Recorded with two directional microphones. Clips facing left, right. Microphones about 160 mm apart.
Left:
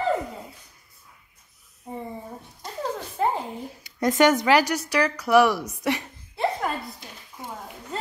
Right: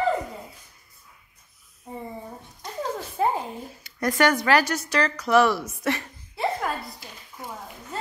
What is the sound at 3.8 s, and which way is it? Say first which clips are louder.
A woman's voice: left 3 dB; 20° left (ahead or behind).